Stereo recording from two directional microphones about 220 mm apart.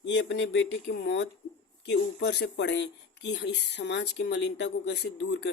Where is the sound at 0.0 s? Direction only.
55° left (ahead or behind).